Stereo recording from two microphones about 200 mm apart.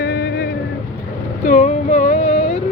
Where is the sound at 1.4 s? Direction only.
35° left (ahead or behind).